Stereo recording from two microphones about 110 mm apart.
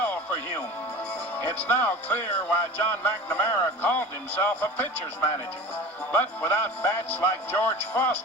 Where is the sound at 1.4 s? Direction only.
15° left (ahead or behind).